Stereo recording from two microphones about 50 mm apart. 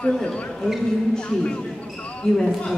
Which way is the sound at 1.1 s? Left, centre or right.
Centre.